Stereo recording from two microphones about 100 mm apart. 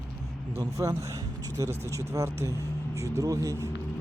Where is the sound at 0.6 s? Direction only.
35° right (ahead or behind).